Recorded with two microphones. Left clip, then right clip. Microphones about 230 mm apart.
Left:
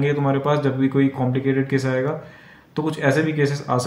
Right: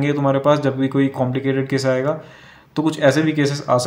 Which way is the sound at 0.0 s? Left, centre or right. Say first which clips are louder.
Right 4 dB; right.